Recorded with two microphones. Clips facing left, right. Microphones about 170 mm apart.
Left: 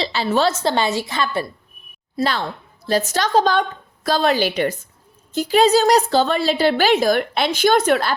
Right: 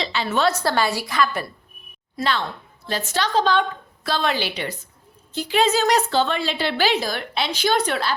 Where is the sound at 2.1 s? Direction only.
40° left (ahead or behind).